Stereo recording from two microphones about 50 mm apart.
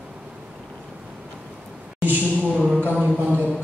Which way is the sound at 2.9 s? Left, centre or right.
Right.